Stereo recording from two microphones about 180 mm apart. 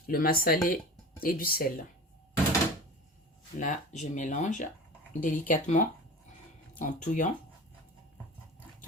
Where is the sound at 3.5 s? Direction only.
45° left (ahead or behind).